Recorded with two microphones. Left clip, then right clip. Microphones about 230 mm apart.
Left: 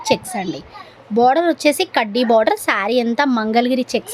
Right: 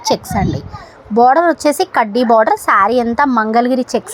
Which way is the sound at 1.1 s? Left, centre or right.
Centre.